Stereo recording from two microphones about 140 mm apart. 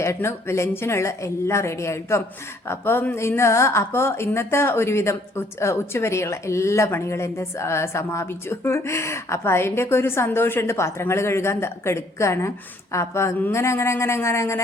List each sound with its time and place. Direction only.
0.0 s a woman's voice: 20° left (ahead or behind)